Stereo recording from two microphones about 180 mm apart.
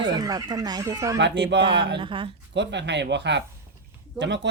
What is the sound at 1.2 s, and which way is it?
Speech, 75° right (ahead or behind).